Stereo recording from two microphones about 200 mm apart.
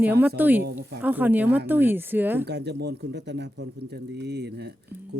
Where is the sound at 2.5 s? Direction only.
55° right (ahead or behind).